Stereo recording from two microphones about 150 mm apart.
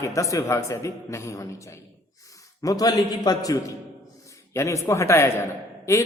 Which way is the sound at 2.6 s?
25° left (ahead or behind).